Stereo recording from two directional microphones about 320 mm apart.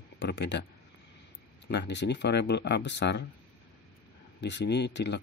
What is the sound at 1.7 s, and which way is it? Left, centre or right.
Speech, left.